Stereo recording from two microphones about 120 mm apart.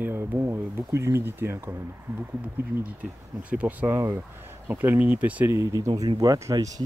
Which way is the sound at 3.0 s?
10° right (ahead or behind).